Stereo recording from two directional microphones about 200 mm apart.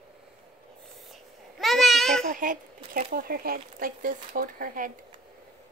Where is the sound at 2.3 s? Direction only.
40° right (ahead or behind).